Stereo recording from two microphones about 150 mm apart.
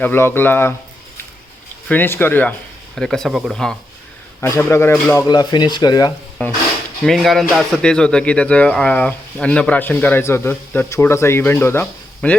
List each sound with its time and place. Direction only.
0.0 s speech: 15° left (ahead or behind)
1.9 s speech: 15° left (ahead or behind)
4.4 s speech: 20° left (ahead or behind)
5.3 s speech: 30° left (ahead or behind)
6.4 s speech: 10° left (ahead or behind)